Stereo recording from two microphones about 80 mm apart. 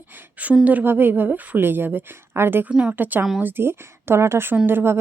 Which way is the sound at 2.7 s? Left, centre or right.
Centre.